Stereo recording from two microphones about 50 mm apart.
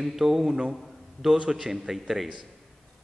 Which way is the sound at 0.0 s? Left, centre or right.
Centre.